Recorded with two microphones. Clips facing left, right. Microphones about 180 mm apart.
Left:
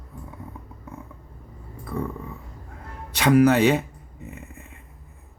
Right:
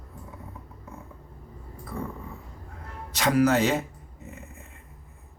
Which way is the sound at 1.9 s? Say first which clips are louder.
Left 5 dB; 70° left (ahead or behind).